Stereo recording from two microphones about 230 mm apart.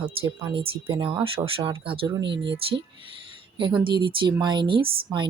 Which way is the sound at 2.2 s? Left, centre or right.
Right.